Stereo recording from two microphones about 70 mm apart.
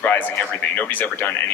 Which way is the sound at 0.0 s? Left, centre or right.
Centre.